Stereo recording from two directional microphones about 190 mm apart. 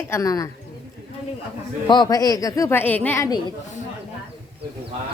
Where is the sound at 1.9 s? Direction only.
20° left (ahead or behind).